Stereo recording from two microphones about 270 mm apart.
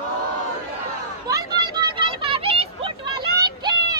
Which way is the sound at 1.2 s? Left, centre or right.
Centre.